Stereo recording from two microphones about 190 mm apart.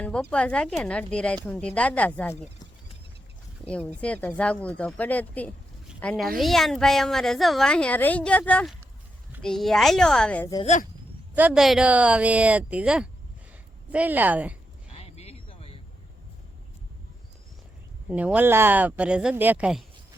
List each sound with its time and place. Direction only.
0.0 s a woman's voice: 5° left (ahead or behind)
3.7 s a woman's voice: 5° left (ahead or behind)
11.3 s speech: 5° right (ahead or behind)
14.9 s a sound: 35° left (ahead or behind)
18.1 s speech: 10° right (ahead or behind)